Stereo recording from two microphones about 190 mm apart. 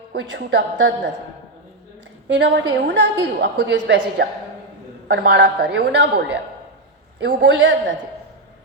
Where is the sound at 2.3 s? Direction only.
70° right (ahead or behind).